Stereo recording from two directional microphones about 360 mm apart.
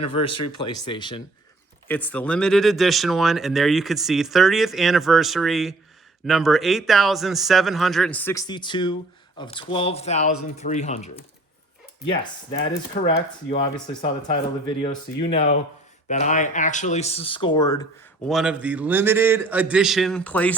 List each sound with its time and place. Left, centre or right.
0.0 s speech: centre
14.8 s speech: centre
18.3 s speech: centre